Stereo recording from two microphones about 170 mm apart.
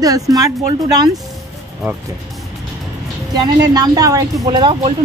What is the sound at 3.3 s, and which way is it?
Speech, 25° right (ahead or behind).